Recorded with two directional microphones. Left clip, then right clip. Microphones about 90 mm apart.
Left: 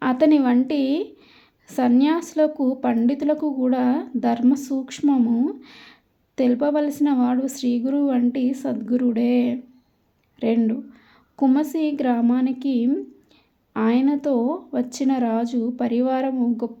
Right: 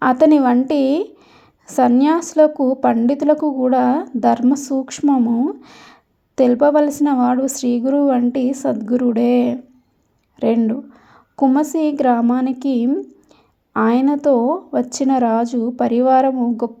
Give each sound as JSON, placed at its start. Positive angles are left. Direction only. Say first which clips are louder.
{"t": 0.0, "sound": "a woman's voice", "louder": "right 6 dB", "side_deg": -40}
{"t": 0.7, "sound": "a woman's voice", "louder": "right 6 dB", "side_deg": -40}
{"t": 5.5, "sound": "a woman's voice", "louder": "right 3 dB", "side_deg": -40}